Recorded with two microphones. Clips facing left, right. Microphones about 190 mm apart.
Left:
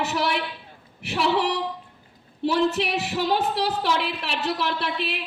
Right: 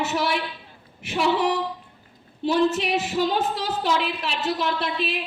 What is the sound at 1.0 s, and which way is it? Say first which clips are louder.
Female singing: right 1 dB; 65° left (ahead or behind).